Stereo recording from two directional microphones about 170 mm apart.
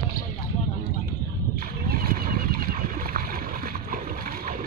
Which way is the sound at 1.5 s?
60° right (ahead or behind).